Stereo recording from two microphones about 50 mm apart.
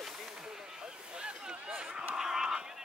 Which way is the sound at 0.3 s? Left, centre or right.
Centre.